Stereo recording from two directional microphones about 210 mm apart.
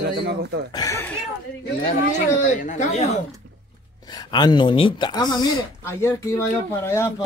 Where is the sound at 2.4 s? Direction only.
35° left (ahead or behind).